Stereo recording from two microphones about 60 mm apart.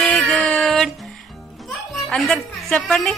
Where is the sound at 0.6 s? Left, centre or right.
Centre.